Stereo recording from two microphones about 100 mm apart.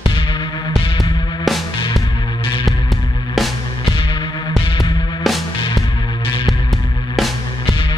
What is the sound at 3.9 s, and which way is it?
Music, 55° left (ahead or behind).